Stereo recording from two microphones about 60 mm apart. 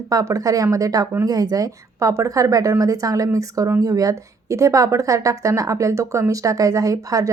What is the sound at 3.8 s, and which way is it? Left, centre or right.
A woman's voice, right.